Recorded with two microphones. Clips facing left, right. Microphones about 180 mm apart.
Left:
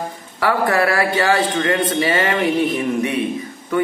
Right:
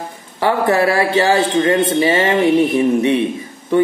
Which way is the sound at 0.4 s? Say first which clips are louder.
Right 3 dB; 25° right (ahead or behind).